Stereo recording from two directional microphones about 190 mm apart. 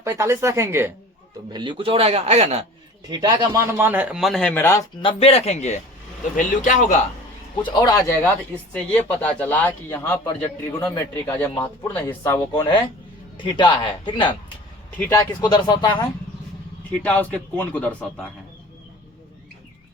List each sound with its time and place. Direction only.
0.0 s speech: 15° right (ahead or behind)
1.5 s a man's voice: 25° right (ahead or behind)
3.1 s speech: 20° right (ahead or behind); by 4.8 s 10° left (ahead or behind)
5.0 s speech: 30° left (ahead or behind)
7.5 s speech: 25° left (ahead or behind)
13.3 s speech: 25° left (ahead or behind)
14.9 s speech: 10° left (ahead or behind)
17.0 s speech: 10° left (ahead or behind)